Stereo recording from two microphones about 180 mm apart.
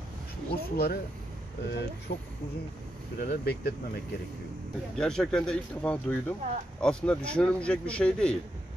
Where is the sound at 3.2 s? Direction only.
60° left (ahead or behind).